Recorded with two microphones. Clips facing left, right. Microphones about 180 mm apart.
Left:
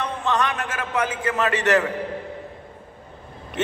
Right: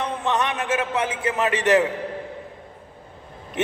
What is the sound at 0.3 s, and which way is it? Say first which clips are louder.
A man's voice: right 1 dB; 15° right (ahead or behind).